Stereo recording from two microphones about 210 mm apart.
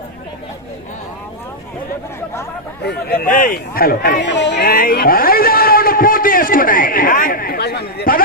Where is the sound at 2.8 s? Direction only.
50° left (ahead or behind).